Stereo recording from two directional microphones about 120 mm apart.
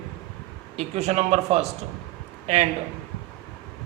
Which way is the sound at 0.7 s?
70° right (ahead or behind).